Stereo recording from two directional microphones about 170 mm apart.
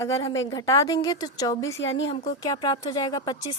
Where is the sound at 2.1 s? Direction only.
25° left (ahead or behind).